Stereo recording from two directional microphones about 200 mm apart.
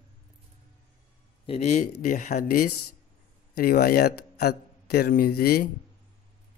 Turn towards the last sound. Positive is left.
turn(degrees=50)  # may be behind; listen again after turning